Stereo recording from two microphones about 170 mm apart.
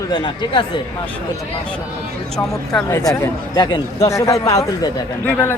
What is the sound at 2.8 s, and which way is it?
A man's voice, 15° left (ahead or behind).